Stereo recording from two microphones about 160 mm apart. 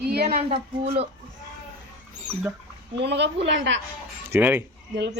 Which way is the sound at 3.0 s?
90° right.